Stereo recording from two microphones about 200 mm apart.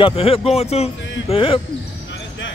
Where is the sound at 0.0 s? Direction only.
30° left (ahead or behind).